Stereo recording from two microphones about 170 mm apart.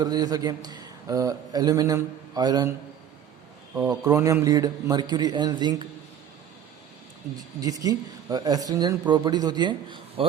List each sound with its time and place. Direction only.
0.0 s a man's voice: 20° right (ahead or behind)
3.8 s a man's voice: 20° right (ahead or behind)
7.6 s a man's voice: 20° right (ahead or behind)